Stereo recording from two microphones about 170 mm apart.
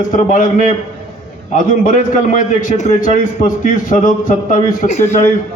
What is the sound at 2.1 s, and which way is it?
Speech, 50° left (ahead or behind).